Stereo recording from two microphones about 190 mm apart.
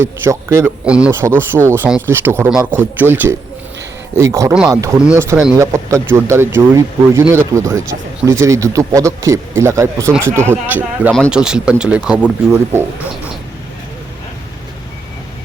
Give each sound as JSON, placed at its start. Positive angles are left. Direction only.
{"t": 0.0, "sound": "speech", "side_deg": -15}